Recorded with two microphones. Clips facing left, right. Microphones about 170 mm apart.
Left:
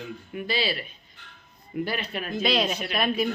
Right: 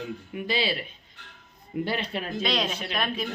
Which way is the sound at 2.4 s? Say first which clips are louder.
Left 4 dB; 5° left (ahead or behind).